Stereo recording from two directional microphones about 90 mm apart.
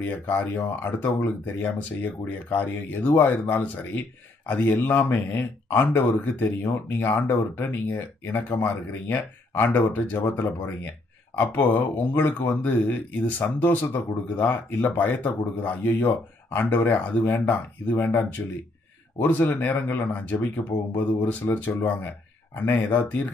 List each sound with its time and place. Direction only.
0.0 s speech: 20° left (ahead or behind)
10.4 s speech: 30° left (ahead or behind)